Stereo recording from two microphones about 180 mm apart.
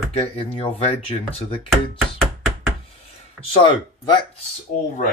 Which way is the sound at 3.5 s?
30° left (ahead or behind).